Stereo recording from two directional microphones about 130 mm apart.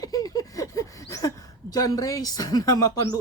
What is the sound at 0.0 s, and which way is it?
A woman's voice, 30° left (ahead or behind).